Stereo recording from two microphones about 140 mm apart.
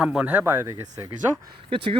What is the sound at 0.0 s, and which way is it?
A man's voice, 5° right (ahead or behind).